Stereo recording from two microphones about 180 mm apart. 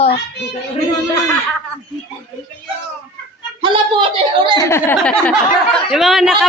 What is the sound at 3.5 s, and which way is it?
Speech, 25° right (ahead or behind).